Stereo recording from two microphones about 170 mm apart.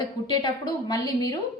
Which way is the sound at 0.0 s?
25° left (ahead or behind).